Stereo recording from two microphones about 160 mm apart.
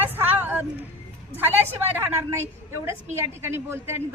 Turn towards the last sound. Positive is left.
turn(degrees=-15)  # may be behind; listen again after turning